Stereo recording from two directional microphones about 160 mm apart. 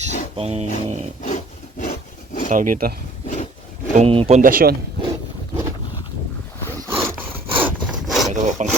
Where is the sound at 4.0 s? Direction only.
35° right (ahead or behind).